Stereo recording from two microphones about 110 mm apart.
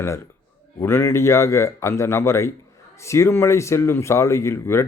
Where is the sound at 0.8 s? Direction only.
20° left (ahead or behind).